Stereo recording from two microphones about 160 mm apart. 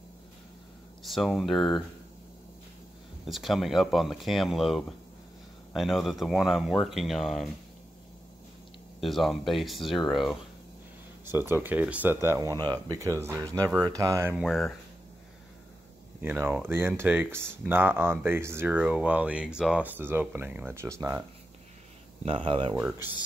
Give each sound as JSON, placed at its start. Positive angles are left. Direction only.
{"t": 1.0, "sound": "speech", "side_deg": 0}
{"t": 3.3, "sound": "speech", "side_deg": 0}
{"t": 9.0, "sound": "speech", "side_deg": 0}
{"t": 11.2, "sound": "speech", "side_deg": -15}
{"t": 14.3, "sound": "speech", "side_deg": 0}
{"t": 16.2, "sound": "speech", "side_deg": -15}
{"t": 22.2, "sound": "speech", "side_deg": -35}